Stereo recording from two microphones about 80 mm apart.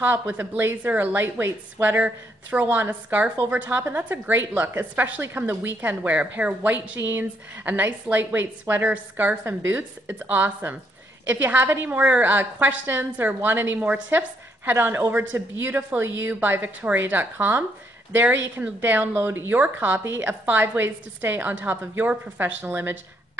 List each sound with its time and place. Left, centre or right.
0.0 s a woman's voice: right
20.0 s a woman's voice: right